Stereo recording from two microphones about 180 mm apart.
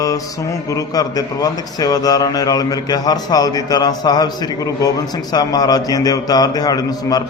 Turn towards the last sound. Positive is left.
turn(degrees=20)  # may be behind; listen again after turning